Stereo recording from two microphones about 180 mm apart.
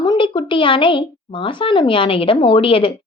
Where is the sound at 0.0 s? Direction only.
25° left (ahead or behind).